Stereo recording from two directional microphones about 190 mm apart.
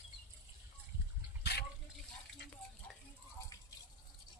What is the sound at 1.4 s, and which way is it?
Water, 60° left (ahead or behind).